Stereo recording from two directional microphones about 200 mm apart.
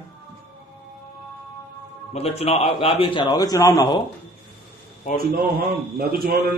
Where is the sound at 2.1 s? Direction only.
30° left (ahead or behind).